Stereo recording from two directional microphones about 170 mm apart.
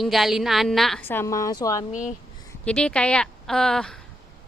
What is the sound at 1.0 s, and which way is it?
Speech, 15° left (ahead or behind).